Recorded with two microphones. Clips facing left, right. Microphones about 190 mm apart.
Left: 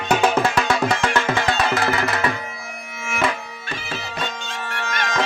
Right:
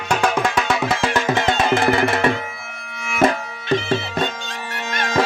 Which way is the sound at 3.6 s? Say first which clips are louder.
Right 13 dB; 25° right (ahead or behind).